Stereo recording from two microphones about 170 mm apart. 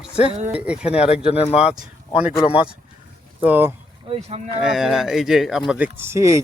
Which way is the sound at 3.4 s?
10° right (ahead or behind).